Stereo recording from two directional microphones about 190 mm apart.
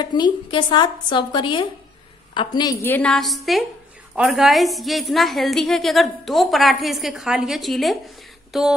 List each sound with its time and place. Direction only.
0.0 s a woman's voice: 25° left (ahead or behind); by 8.7 s centre (ahead or behind)